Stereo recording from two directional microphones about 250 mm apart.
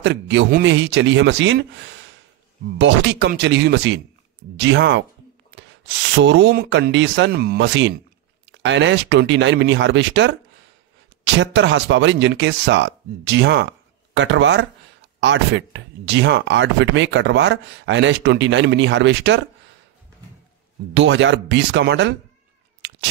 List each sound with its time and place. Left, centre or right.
0.0 s speech: right
11.3 s speech: right
20.9 s speech: right